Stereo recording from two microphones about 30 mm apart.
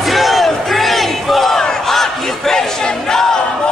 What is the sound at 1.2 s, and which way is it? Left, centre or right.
Battle cry, centre.